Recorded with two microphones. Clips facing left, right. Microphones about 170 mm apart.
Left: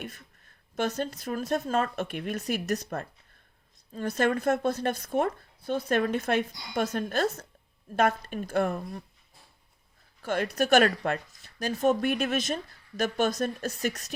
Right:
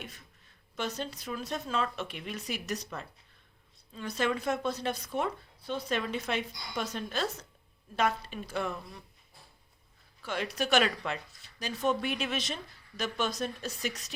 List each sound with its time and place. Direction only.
0.8 s a woman's voice: 50° left (ahead or behind)
10.2 s a woman's voice: 50° left (ahead or behind)